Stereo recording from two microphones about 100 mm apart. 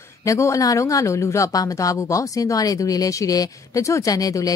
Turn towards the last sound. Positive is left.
turn(degrees=35)  # may be behind; listen again after turning